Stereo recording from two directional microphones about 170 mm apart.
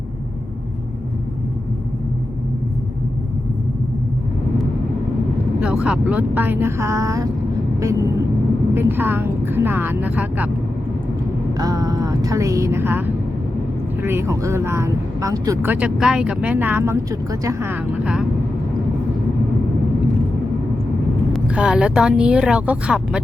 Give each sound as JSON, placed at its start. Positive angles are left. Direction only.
{"t": 5.5, "sound": "speech", "side_deg": -5}
{"t": 8.7, "sound": "speech", "side_deg": -15}
{"t": 11.5, "sound": "speech", "side_deg": -20}
{"t": 21.3, "sound": "a woman's voice", "side_deg": -5}